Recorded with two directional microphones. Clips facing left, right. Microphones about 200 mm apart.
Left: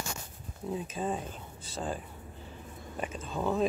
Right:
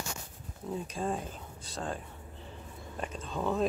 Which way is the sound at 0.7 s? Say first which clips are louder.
Left 1 dB; 5° left (ahead or behind).